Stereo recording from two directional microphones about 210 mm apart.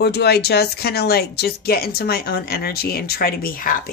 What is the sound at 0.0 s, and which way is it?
Speech, 50° left (ahead or behind).